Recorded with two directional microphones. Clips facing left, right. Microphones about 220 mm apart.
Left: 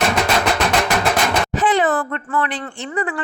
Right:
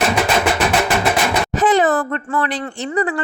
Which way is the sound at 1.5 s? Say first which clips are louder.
Right 4 dB; 45° right (ahead or behind).